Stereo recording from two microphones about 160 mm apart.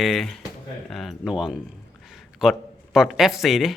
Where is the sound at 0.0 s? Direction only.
Centre (ahead or behind).